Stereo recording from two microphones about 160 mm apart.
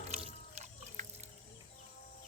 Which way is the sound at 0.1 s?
45° right (ahead or behind).